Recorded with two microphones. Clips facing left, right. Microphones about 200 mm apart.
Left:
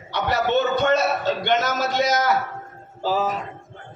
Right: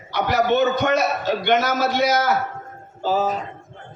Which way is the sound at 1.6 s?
55° right (ahead or behind).